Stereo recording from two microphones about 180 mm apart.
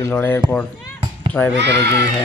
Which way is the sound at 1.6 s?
70° right (ahead or behind).